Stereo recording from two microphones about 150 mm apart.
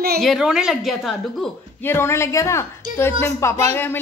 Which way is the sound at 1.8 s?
15° left (ahead or behind).